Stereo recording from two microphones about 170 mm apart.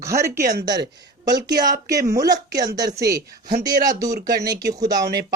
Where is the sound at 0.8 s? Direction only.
75° right (ahead or behind).